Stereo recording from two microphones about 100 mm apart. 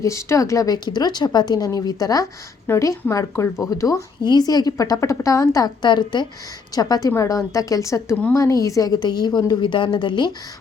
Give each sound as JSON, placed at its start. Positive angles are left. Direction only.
{"t": 0.0, "sound": "speech", "side_deg": 30}
{"t": 4.2, "sound": "a woman's voice", "side_deg": 45}